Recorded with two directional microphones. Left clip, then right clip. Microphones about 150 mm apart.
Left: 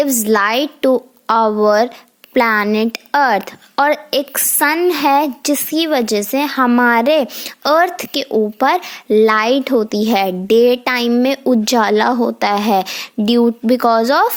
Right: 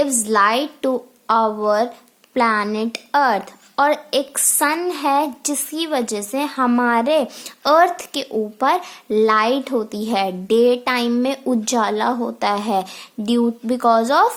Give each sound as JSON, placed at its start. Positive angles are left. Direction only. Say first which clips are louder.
{"t": 0.0, "sound": "a woman's voice", "louder": "left 2 dB", "side_deg": 40}